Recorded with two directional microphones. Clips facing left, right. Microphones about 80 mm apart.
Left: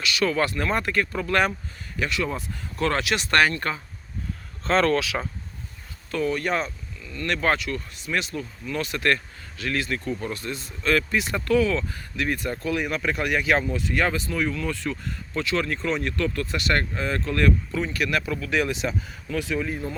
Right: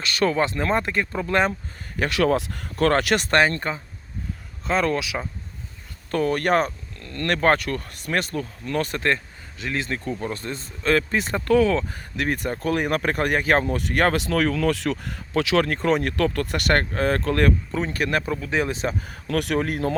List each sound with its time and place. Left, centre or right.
0.0 s speech: right
0.3 s speech: right
2.0 s speech: right
3.7 s speech: right
4.6 s speech: centre
6.1 s speech: right
7.4 s speech: right
9.0 s speech: right
19.3 s speech: right